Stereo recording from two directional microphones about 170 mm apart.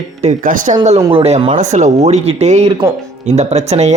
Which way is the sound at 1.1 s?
35° right (ahead or behind).